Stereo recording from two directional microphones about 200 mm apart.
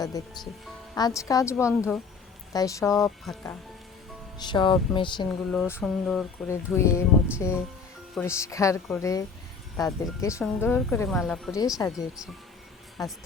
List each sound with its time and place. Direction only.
0.0 s speech: 20° left (ahead or behind)
4.4 s speech: 20° left (ahead or behind)
5.5 s speech: 10° left (ahead or behind)
6.5 s speech: 15° left (ahead or behind)
11.5 s speech: 15° left (ahead or behind)